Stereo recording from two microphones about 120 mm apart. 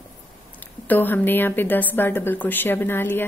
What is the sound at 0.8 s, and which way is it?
A woman's voice, 15° left (ahead or behind).